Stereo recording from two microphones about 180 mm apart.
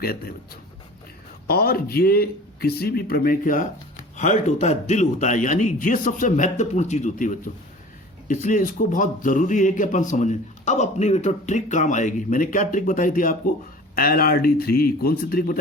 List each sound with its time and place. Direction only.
0.0 s speech: 55° left (ahead or behind)